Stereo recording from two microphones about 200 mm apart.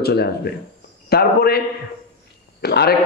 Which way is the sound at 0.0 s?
55° left (ahead or behind).